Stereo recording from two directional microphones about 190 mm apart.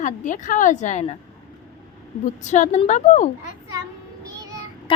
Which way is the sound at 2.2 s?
40° left (ahead or behind).